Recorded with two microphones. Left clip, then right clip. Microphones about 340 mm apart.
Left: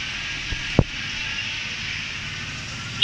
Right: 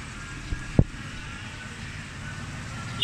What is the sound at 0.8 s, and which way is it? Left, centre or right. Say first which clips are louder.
Vehicle: left 3 dB; left.